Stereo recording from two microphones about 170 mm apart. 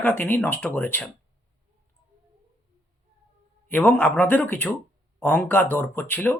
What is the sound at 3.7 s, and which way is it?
Speech, 10° left (ahead or behind).